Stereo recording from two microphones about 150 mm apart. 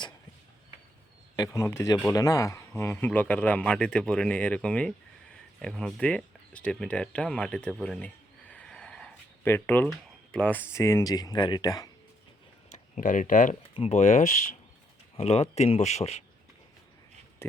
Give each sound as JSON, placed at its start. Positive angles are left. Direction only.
{"t": 1.4, "sound": "speech", "side_deg": 20}
{"t": 12.7, "sound": "speech", "side_deg": 60}
{"t": 13.6, "sound": "speech", "side_deg": 35}
{"t": 14.0, "sound": "speech", "side_deg": 50}
{"t": 17.4, "sound": "a sound", "side_deg": 15}